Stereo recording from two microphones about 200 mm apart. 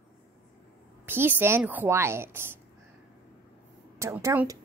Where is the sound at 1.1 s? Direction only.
10° right (ahead or behind).